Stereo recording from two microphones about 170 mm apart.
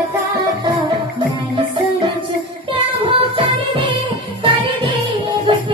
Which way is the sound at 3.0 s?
30° right (ahead or behind).